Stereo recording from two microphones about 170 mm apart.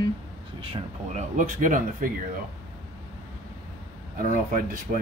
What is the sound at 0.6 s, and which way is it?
Speech, 35° right (ahead or behind).